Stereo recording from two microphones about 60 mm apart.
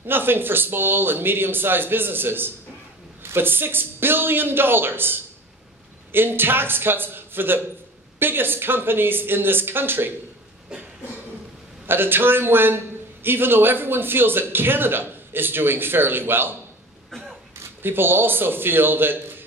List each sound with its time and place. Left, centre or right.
0.0 s a man's voice: right
10.7 s a sound: centre
11.8 s a man's voice: right
17.1 s throat clearing: centre
17.8 s a man's voice: right